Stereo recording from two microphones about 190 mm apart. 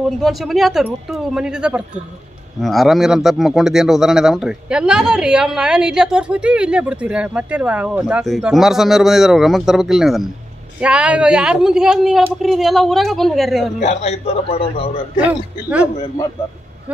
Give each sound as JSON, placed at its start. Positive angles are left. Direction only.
{"t": 0.2, "sound": "speech", "side_deg": 0}
{"t": 13.7, "sound": "a man's voice", "side_deg": 35}
{"t": 15.2, "sound": "a man's voice", "side_deg": -5}